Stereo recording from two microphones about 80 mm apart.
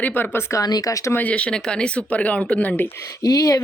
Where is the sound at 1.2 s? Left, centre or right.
Centre.